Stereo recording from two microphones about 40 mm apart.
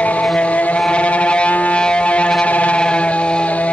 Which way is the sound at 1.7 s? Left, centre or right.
Left.